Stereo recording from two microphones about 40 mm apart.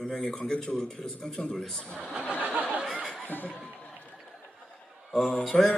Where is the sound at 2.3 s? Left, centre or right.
Right.